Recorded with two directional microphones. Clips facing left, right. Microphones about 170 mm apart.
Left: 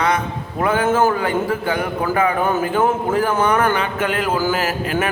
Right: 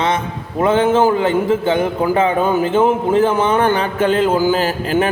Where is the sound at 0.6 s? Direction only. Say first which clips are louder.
Right 4 dB; 25° right (ahead or behind).